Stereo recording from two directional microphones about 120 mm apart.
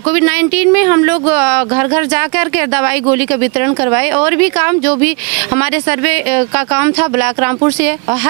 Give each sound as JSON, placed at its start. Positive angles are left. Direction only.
{"t": 0.1, "sound": "speech", "side_deg": -20}